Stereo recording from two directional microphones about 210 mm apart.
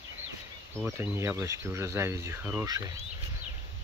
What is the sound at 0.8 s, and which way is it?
Speech, 10° right (ahead or behind).